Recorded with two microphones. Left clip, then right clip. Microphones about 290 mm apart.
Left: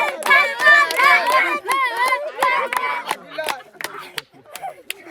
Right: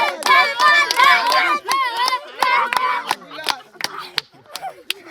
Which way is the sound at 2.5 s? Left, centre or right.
Centre.